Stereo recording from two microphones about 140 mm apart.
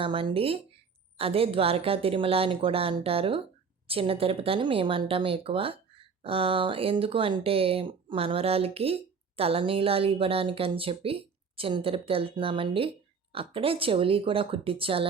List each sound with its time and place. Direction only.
0.0 s a woman's voice: 40° right (ahead or behind)